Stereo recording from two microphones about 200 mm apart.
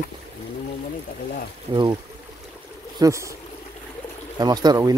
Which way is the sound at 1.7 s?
25° right (ahead or behind).